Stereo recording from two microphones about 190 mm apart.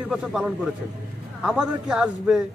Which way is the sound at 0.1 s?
5° right (ahead or behind).